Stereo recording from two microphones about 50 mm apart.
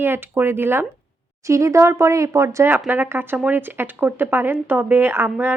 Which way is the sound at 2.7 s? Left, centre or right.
Right.